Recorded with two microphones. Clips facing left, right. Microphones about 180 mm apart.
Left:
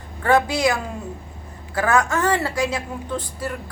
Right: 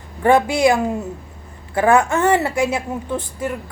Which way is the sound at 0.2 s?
25° right (ahead or behind).